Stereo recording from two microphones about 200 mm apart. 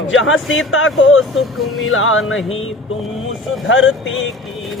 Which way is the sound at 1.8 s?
85° left.